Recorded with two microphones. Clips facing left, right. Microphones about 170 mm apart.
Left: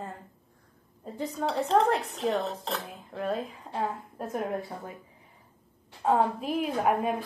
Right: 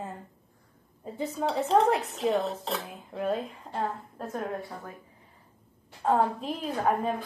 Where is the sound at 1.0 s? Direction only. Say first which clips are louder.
Right 1 dB; 5° right (ahead or behind).